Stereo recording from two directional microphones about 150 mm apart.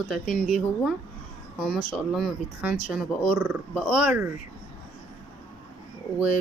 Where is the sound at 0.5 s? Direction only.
Centre (ahead or behind).